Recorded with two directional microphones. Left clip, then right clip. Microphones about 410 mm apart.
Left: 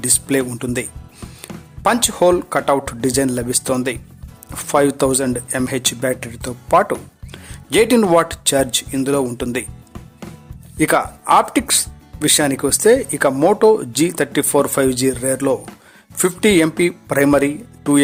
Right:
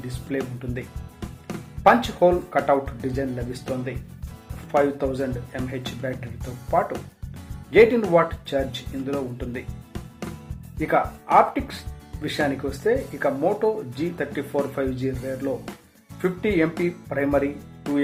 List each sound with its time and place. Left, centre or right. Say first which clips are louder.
0.3 s speech: left 5 dB; left
10.8 s speech: left 6 dB; left